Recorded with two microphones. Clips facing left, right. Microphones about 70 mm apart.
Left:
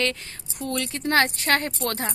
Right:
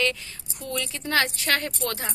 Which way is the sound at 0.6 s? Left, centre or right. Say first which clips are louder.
Left 3 dB; left.